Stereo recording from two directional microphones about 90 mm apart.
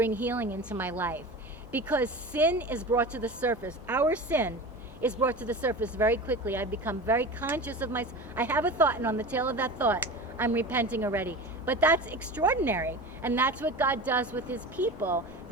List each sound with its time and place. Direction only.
0.0 s speech: 20° right (ahead or behind)